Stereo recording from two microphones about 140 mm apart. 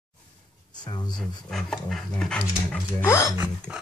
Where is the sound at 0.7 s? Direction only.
30° left (ahead or behind).